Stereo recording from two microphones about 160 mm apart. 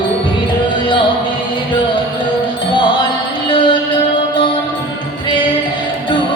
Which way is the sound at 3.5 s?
30° left (ahead or behind).